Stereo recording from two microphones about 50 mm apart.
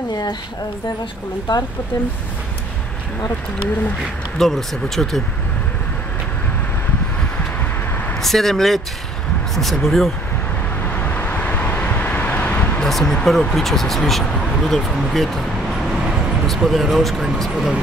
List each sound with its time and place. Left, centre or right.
4.4 s speech: centre
8.2 s speech: centre
11.0 s vehicle: left
12.8 s speech: centre
16.4 s speech: centre